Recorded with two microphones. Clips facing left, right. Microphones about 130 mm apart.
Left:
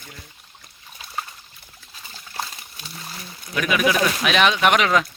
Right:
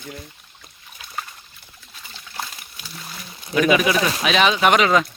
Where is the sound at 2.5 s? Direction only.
25° left (ahead or behind).